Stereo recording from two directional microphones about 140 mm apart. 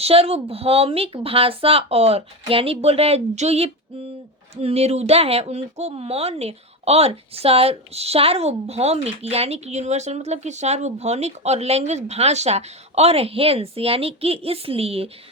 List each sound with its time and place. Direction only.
0.0 s speech: 45° right (ahead or behind)